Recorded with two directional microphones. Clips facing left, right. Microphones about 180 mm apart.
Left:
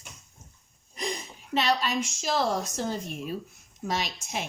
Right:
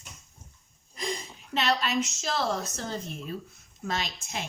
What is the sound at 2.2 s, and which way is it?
A woman's voice, 10° left (ahead or behind).